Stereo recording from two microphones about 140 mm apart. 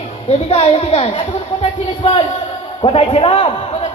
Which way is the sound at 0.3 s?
45° left (ahead or behind).